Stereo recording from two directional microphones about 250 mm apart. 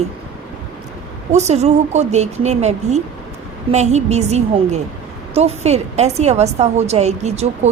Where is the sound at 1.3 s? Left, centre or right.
Right.